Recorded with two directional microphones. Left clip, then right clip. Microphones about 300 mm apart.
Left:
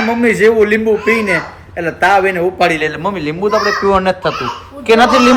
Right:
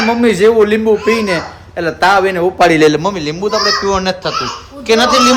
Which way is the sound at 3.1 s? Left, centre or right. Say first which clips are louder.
Left 1 dB; centre.